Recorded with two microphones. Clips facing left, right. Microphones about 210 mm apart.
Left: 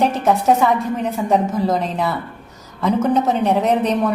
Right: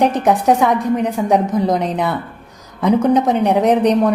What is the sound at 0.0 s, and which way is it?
A woman's voice, 15° right (ahead or behind).